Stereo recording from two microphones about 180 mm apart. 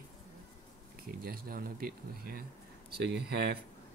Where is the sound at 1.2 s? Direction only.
55° right (ahead or behind).